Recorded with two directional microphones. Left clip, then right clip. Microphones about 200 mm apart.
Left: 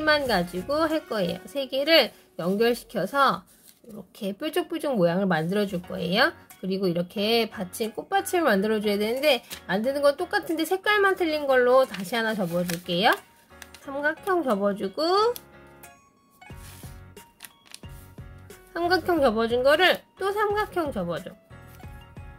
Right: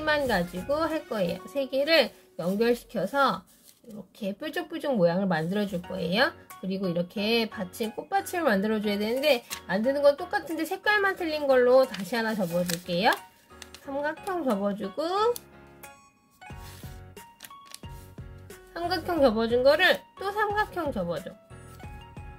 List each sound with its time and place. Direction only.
0.0 s speech: 20° left (ahead or behind)
18.7 s a woman's voice: 20° left (ahead or behind)